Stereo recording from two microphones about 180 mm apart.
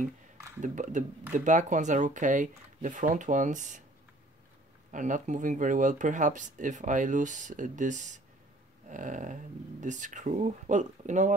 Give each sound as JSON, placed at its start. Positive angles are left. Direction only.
{"t": 0.6, "sound": "speech", "side_deg": -45}
{"t": 4.9, "sound": "speech", "side_deg": -45}